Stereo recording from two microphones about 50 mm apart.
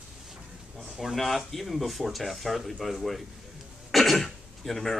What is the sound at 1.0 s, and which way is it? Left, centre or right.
Speech, centre.